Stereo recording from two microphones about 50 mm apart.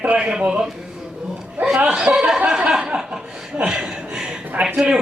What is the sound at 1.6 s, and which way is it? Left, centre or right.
Chuckle, right.